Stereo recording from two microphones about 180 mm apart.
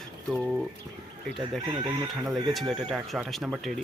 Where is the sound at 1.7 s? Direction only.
25° right (ahead or behind).